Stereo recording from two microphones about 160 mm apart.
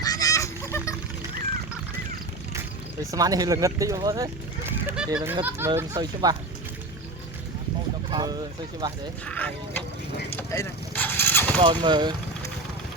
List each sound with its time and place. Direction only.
0.0 s honk: 20° left (ahead or behind)
2.5 s speech: 20° right (ahead or behind)
8.1 s speech: 25° right (ahead or behind)
9.2 s speech: 10° left (ahead or behind)
10.5 s vehicle: 15° left (ahead or behind)
11.6 s speech: 25° right (ahead or behind)